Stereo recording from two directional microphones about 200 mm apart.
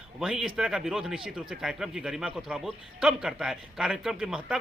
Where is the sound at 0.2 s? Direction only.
Centre (ahead or behind).